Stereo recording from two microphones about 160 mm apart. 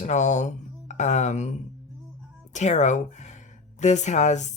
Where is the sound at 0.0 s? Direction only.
50° left (ahead or behind).